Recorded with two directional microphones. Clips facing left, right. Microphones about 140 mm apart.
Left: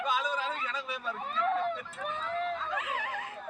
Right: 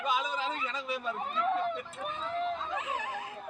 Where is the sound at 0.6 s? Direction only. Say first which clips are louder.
Right 2 dB; centre (ahead or behind).